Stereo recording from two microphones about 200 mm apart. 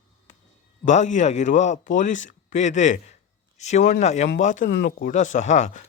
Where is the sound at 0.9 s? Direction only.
35° left (ahead or behind).